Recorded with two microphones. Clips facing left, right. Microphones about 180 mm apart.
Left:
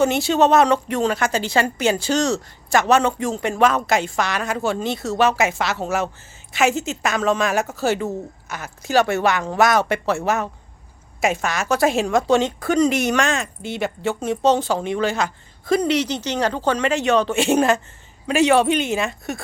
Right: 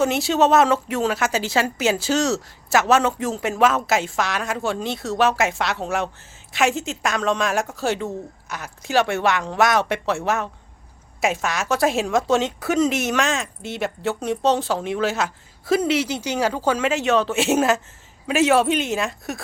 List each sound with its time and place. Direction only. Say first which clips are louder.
0.0 s a woman's voice: left 2 dB; centre (ahead or behind)